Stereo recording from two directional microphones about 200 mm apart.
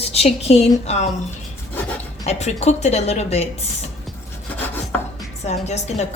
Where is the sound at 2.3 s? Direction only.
35° left (ahead or behind).